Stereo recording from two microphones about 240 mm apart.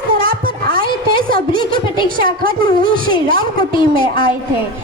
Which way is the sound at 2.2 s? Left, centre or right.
Right.